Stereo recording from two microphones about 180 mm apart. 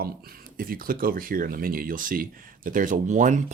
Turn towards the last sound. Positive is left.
turn(degrees=-40)  # may be behind; listen again after turning